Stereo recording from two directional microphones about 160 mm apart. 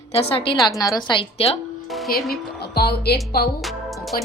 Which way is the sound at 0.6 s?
25° left (ahead or behind).